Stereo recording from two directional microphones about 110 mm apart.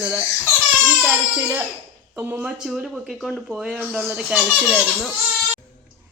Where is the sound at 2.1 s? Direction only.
20° right (ahead or behind).